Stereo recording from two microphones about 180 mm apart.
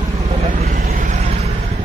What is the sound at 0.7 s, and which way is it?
Vehicle, 50° right (ahead or behind).